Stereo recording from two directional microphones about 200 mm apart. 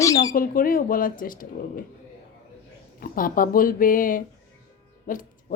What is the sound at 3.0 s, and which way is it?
Speech, 45° left (ahead or behind).